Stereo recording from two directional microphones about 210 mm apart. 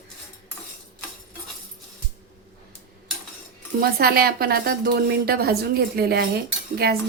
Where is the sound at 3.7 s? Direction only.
45° right (ahead or behind).